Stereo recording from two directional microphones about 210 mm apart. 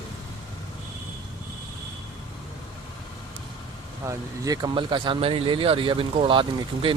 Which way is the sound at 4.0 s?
15° right (ahead or behind).